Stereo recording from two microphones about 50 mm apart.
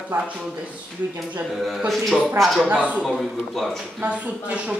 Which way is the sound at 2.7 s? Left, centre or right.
Right.